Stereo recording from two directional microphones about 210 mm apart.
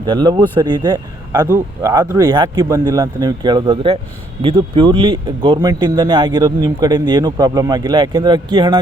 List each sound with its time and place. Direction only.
0.0 s speech: 20° right (ahead or behind)